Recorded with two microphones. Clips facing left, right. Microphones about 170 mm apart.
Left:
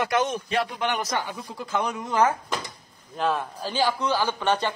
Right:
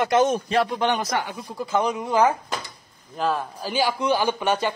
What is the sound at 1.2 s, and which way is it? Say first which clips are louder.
Speech: right 3 dB; 10° right (ahead or behind).